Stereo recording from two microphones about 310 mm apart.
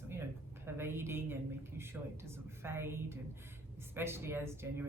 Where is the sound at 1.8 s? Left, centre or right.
Centre.